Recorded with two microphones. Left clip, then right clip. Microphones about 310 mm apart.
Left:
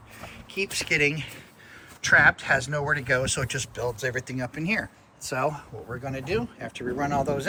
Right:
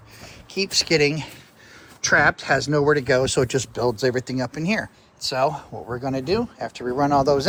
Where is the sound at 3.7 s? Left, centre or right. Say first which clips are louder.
Right 6 dB; right.